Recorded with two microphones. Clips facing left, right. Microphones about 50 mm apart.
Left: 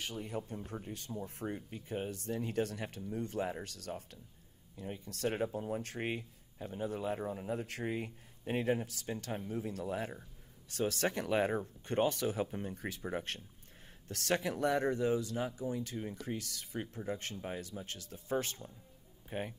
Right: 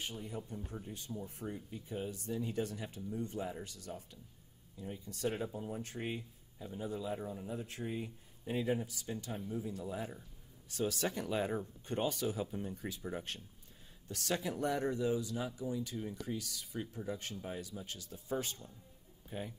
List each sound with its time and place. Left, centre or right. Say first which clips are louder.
0.0 s speech: left 3 dB; left
4.7 s speech: left 2 dB; left
9.7 s speech: left 3 dB; left